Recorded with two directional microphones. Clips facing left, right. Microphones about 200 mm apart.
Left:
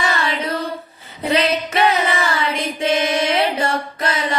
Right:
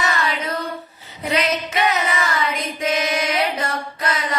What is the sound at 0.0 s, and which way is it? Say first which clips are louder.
Child singing: left 2 dB; 30° left (ahead or behind).